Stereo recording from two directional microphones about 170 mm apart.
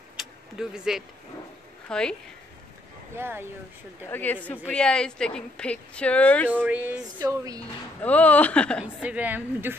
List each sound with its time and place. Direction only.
0.2 s vehicle: 5° right (ahead or behind)
1.9 s speech: 5° left (ahead or behind)
3.2 s speech: 15° right (ahead or behind)
4.1 s speech: 10° left (ahead or behind)
6.5 s speech: 10° right (ahead or behind)
7.2 s speech: 20° right (ahead or behind)
8.0 s speech: 10° left (ahead or behind)
8.8 s speech: 10° right (ahead or behind)